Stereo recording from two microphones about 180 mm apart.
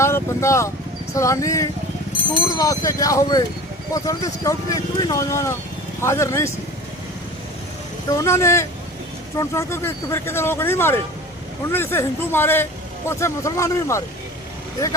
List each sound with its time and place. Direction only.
0.0 s speech: 15° left (ahead or behind)
8.2 s speech: 15° left (ahead or behind)